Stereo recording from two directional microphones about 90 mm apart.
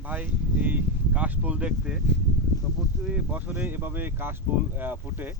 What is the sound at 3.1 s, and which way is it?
Speech, 15° right (ahead or behind).